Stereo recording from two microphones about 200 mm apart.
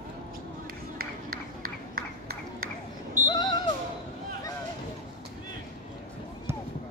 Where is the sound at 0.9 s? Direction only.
50° right (ahead or behind).